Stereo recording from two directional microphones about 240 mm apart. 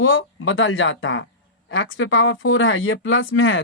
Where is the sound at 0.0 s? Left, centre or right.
Left.